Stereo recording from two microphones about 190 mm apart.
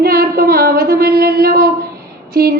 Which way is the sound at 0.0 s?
55° right (ahead or behind).